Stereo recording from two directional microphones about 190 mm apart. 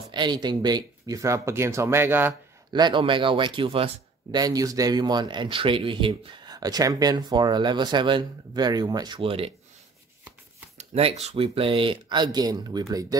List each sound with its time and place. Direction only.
0.1 s speech: 25° right (ahead or behind)
2.7 s speech: 25° right (ahead or behind)
10.8 s speech: 35° right (ahead or behind)